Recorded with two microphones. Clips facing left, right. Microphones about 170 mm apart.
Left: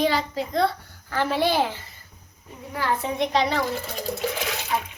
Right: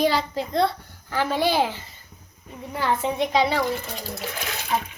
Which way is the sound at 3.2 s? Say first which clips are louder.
Right 1 dB; 10° right (ahead or behind).